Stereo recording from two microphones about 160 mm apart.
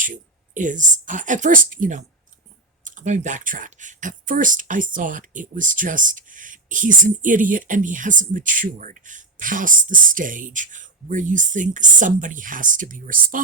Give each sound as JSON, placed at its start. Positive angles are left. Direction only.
{"t": 0.0, "sound": "speech", "side_deg": -55}